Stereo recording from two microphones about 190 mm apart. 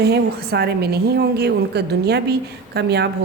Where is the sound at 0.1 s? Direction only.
60° right (ahead or behind).